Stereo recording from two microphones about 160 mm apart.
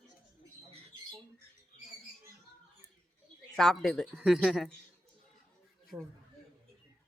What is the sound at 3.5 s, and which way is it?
Speech, 5° left (ahead or behind).